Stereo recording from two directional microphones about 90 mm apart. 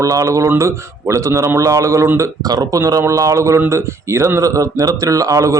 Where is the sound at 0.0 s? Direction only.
40° right (ahead or behind).